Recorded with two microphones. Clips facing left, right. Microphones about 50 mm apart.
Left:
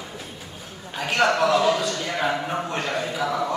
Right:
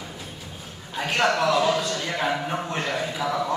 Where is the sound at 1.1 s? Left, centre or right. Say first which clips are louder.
Left 2 dB; left.